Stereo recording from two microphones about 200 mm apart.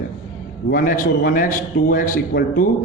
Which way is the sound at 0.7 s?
40° left (ahead or behind).